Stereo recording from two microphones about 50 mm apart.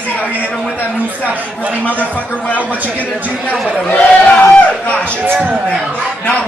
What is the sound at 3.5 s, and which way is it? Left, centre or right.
Speech, left.